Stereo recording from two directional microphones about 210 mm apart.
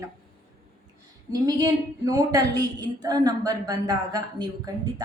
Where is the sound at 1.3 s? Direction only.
15° right (ahead or behind).